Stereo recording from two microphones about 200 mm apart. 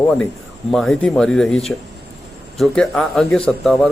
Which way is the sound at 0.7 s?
5° left (ahead or behind).